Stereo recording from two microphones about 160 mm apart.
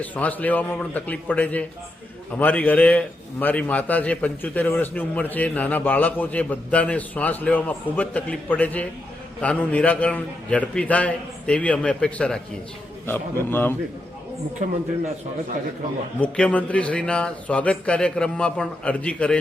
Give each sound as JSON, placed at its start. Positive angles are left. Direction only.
{"t": 0.0, "sound": "a man's voice", "side_deg": 10}
{"t": 14.6, "sound": "speech", "side_deg": -50}
{"t": 16.2, "sound": "a man's voice", "side_deg": 5}